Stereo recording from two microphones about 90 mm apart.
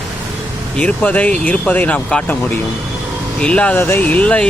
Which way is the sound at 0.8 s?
15° left (ahead or behind).